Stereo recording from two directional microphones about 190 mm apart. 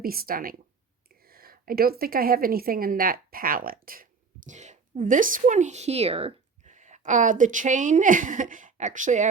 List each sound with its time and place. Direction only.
0.0 s a woman's voice: 50° right (ahead or behind)
4.4 s a woman's voice: 40° right (ahead or behind)